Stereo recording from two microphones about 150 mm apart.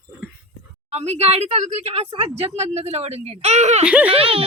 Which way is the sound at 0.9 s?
45° right (ahead or behind).